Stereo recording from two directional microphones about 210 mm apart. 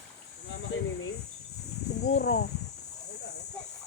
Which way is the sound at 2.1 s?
55° left (ahead or behind).